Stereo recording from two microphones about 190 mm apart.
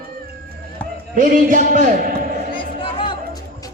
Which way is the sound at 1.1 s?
45° right (ahead or behind).